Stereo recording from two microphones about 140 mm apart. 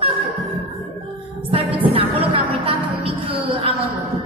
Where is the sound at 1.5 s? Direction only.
40° right (ahead or behind).